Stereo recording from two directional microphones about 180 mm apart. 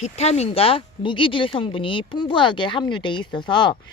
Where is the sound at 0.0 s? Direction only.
35° left (ahead or behind).